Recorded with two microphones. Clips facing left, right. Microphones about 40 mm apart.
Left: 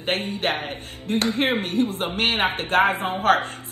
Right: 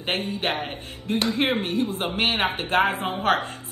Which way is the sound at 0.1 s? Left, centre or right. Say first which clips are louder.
Left 2 dB; left.